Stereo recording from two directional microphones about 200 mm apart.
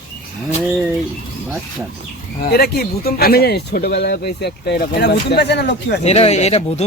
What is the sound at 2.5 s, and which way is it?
Speech, 50° left (ahead or behind).